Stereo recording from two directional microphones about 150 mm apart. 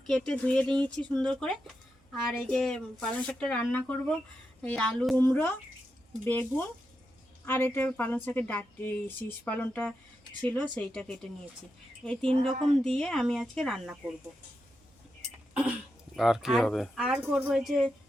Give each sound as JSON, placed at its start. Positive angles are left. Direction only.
{"t": 0.1, "sound": "speech", "side_deg": 5}
{"t": 16.1, "sound": "speech", "side_deg": 0}